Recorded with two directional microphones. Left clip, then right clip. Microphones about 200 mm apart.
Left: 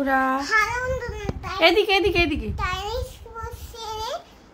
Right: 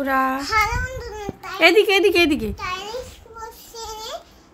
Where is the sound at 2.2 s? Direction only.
35° right (ahead or behind).